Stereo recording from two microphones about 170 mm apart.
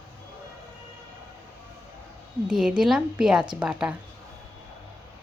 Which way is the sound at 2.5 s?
Centre (ahead or behind).